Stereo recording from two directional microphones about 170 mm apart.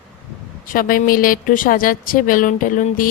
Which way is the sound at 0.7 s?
55° left (ahead or behind).